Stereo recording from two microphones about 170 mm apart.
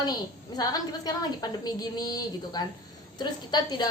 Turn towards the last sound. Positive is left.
turn(degrees=25)  # may be behind; listen again after turning